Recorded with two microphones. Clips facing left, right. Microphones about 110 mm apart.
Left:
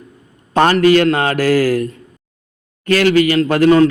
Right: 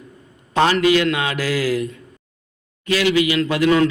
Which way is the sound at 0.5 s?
50° left (ahead or behind).